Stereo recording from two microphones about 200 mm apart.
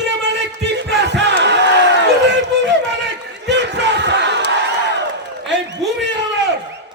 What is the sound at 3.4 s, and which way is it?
Battle cry, 60° right (ahead or behind).